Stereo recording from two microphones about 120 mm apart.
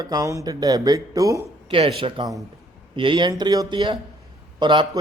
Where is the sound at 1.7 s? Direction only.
50° right (ahead or behind).